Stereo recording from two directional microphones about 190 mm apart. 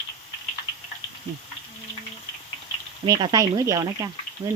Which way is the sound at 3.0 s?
20° right (ahead or behind).